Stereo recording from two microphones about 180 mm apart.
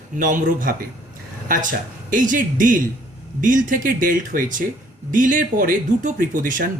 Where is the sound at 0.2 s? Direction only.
50° right (ahead or behind).